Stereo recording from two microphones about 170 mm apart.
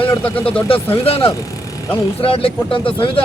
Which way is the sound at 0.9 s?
35° left (ahead or behind).